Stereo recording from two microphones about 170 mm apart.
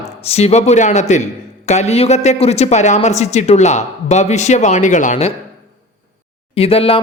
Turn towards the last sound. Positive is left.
turn(degrees=35)  # may be behind; listen again after turning